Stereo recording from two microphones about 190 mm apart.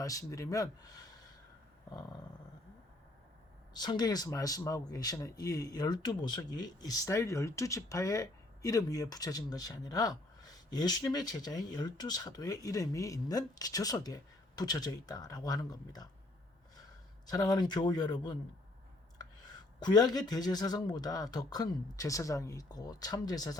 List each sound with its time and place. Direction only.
0.0 s speech: 15° left (ahead or behind)
3.8 s speech: 20° left (ahead or behind)
17.2 s speech: 20° left (ahead or behind)
19.8 s speech: 20° left (ahead or behind)